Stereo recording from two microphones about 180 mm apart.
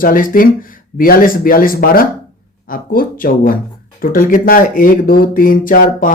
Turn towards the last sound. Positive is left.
turn(degrees=50)  # may be behind; listen again after turning